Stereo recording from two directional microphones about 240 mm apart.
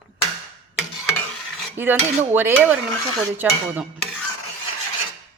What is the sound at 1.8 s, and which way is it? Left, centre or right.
A woman's voice, centre.